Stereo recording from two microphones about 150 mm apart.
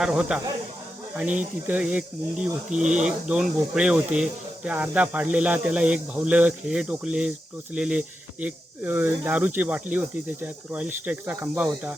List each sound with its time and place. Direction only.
0.0 s speech: 5° right (ahead or behind)
2.6 s speech: 55° right (ahead or behind)
2.9 s speech: 5° right (ahead or behind)